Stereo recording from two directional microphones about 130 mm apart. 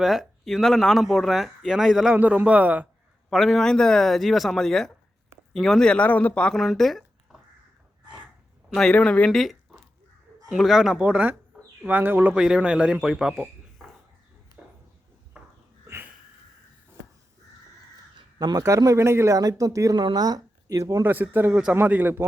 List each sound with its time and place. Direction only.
0.0 s speech: centre (ahead or behind)
3.2 s speech: centre (ahead or behind)
8.7 s speech: 5° left (ahead or behind)
10.5 s speech: centre (ahead or behind)
15.3 s a sound: 10° right (ahead or behind)
18.3 s a man's voice: 30° right (ahead or behind)
21.1 s speech: 15° right (ahead or behind)